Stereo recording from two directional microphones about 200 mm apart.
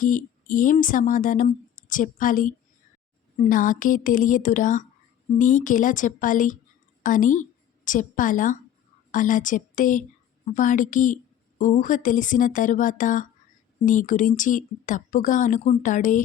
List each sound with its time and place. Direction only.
0.0 s a woman's voice: 40° left (ahead or behind)